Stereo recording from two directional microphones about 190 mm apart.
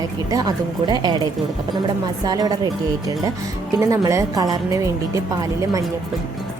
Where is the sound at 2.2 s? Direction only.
20° right (ahead or behind).